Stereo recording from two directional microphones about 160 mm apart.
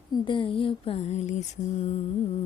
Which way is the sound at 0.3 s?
30° left (ahead or behind).